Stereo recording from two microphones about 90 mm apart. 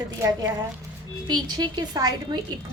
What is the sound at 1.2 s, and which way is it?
Speech, 55° right (ahead or behind).